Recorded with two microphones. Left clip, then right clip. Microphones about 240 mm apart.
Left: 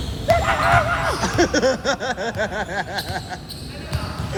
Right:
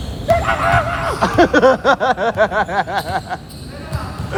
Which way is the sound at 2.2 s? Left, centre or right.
Right.